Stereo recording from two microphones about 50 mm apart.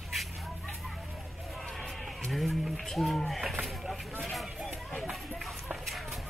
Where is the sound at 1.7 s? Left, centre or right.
Centre.